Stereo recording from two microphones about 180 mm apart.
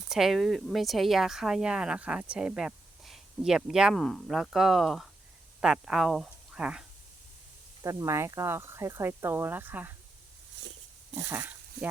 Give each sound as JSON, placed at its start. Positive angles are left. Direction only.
{"t": 0.1, "sound": "speech", "side_deg": 0}
{"t": 7.8, "sound": "speech", "side_deg": -20}
{"t": 10.6, "sound": "pig", "side_deg": -80}
{"t": 11.1, "sound": "speech", "side_deg": -10}